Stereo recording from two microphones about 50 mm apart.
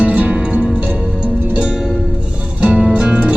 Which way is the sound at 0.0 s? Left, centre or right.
Right.